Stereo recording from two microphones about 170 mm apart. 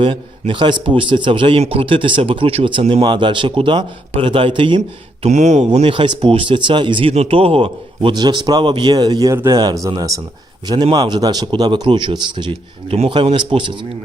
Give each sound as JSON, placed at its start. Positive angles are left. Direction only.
{"t": 0.0, "sound": "speech", "side_deg": -30}
{"t": 5.2, "sound": "speech", "side_deg": -45}